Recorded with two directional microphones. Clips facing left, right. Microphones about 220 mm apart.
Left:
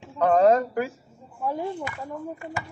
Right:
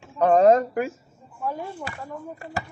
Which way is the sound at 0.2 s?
20° right (ahead or behind).